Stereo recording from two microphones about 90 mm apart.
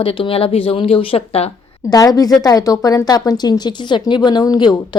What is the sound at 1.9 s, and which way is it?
A woman's voice, 45° left (ahead or behind).